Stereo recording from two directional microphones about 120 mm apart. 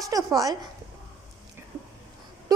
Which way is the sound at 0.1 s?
30° right (ahead or behind).